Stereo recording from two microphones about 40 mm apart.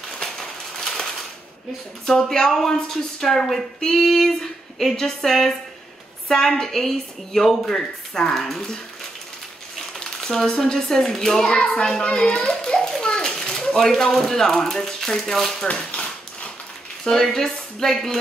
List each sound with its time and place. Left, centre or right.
0.1 s a sound: centre
2.0 s a woman's voice: centre
9.8 s a sound: centre
10.4 s a woman's voice: centre
11.4 s hands: centre
12.1 s a child's voice: left
13.0 s children playing: centre
13.7 s a woman's voice: centre
15.7 s speech: left
17.0 s a woman's voice: centre